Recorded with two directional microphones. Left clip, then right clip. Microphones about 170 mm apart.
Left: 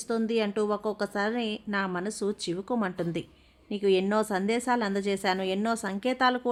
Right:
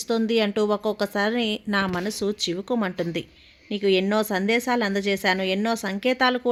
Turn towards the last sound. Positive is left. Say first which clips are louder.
# right 4 dB
turn(degrees=-20)  # may be behind; listen again after turning